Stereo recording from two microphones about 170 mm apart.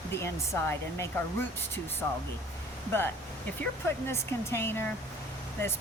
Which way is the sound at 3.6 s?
15° left (ahead or behind).